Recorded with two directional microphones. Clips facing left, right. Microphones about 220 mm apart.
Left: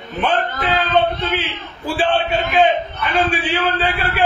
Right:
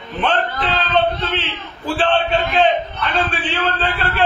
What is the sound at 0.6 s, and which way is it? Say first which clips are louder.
Speech: left 3 dB; 45° left (ahead or behind).